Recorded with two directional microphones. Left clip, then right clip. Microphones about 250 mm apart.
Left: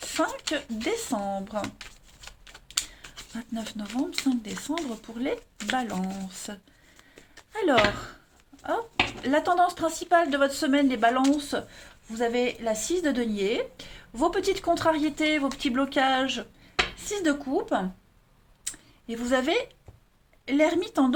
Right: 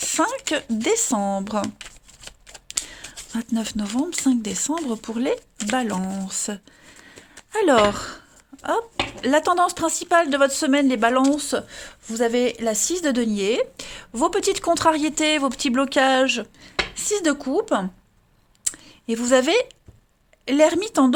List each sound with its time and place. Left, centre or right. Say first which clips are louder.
0.0 s speech: right 6 dB; right
2.9 s a sound: right 8 dB; right
4.3 s speech: right 7 dB; right
9.2 s speech: right 5 dB; right
18.6 s a sound: right 9 dB; right
20.4 s speech: right 6 dB; right